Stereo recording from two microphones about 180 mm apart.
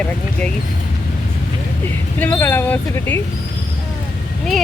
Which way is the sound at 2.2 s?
10° left (ahead or behind).